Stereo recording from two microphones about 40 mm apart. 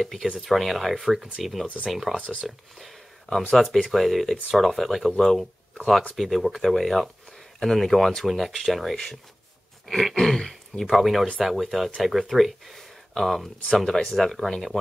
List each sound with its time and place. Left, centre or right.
0.0 s speech: centre
10.9 s speech: centre